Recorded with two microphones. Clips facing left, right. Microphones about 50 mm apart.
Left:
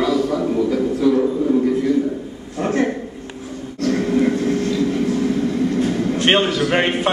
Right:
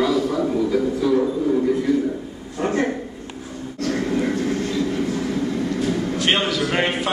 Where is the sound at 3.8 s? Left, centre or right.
Centre.